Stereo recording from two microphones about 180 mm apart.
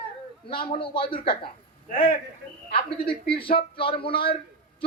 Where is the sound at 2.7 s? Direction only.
30° left (ahead or behind).